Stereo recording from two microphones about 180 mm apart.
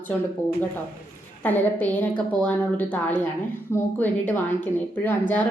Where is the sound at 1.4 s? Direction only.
10° left (ahead or behind).